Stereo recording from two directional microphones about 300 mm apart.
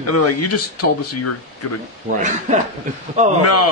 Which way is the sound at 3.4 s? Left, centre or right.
Left.